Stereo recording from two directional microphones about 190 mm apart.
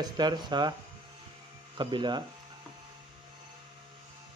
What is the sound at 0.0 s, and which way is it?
Speech, 20° right (ahead or behind).